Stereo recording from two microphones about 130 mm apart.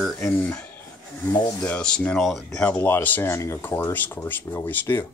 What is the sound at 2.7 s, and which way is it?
Speech, 15° left (ahead or behind).